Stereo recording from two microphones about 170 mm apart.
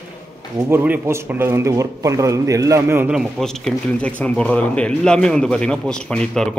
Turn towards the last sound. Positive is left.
turn(degrees=5)  # may be behind; listen again after turning